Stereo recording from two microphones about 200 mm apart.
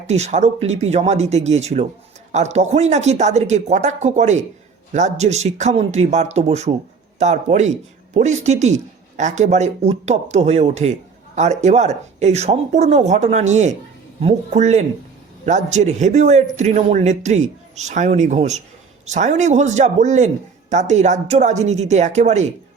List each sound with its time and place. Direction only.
0.1 s speech: 35° right (ahead or behind)